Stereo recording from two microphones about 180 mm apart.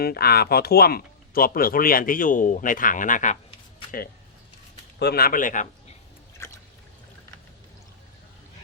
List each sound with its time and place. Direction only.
0.0 s speech: 60° left (ahead or behind)
4.9 s speech: 60° left (ahead or behind)
6.4 s a sound: 15° left (ahead or behind)